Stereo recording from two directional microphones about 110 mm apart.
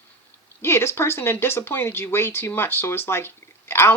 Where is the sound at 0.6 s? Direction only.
25° left (ahead or behind).